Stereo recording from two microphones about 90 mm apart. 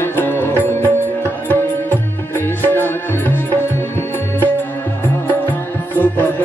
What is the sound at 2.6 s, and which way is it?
Music, 20° left (ahead or behind).